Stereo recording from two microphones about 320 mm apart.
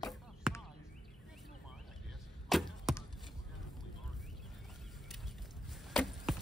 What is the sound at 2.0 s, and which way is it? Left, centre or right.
Arrow, centre.